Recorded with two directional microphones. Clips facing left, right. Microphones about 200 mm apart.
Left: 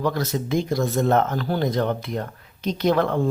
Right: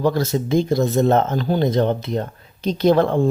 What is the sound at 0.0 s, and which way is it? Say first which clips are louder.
Speech: right 5 dB; 25° right (ahead or behind).